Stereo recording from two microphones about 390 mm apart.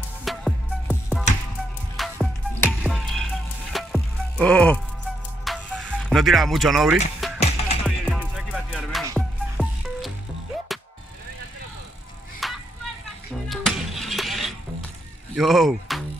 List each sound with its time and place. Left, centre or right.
0.2 s music: centre
7.3 s music: centre
7.8 s music: centre
12.4 s music: centre
15.3 s speech: centre